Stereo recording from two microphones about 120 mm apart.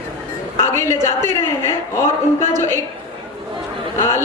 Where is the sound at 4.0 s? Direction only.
20° left (ahead or behind).